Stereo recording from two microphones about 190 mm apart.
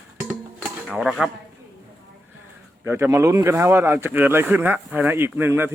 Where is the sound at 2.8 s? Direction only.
15° right (ahead or behind).